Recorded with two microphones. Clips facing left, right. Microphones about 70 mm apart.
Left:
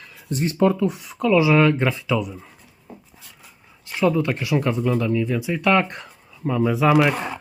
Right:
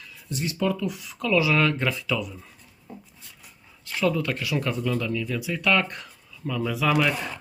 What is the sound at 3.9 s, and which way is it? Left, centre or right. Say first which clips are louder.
Speech: left 5 dB; left.